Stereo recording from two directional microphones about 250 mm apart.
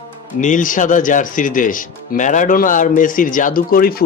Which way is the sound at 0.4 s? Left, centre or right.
Left.